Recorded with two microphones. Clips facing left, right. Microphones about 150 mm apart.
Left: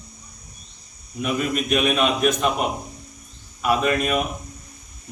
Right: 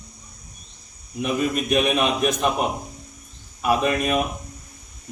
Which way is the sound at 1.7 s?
15° right (ahead or behind).